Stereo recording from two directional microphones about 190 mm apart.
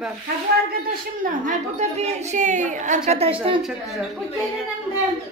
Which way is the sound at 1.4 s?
35° right (ahead or behind).